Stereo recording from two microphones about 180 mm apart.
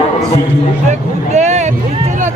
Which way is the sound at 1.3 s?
40° right (ahead or behind).